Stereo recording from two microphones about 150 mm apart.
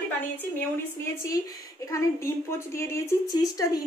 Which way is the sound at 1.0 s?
20° left (ahead or behind).